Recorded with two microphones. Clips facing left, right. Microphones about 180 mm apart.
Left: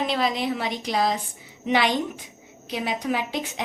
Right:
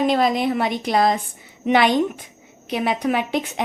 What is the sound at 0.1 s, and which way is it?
A woman's voice, 50° right (ahead or behind).